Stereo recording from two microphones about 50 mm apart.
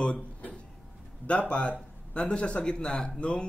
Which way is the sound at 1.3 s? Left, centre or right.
Left.